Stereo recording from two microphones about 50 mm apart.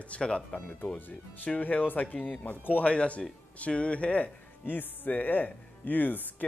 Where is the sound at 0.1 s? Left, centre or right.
Left.